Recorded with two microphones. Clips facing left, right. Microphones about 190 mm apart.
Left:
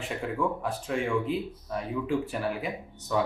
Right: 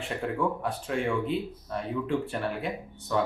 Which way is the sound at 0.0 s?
Centre (ahead or behind).